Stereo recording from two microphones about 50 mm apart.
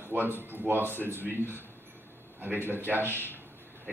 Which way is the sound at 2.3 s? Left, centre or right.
Right.